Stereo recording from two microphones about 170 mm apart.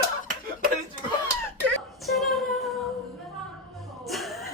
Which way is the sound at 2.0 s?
Centre (ahead or behind).